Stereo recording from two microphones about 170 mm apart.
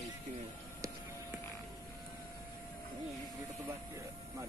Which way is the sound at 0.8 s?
20° right (ahead or behind).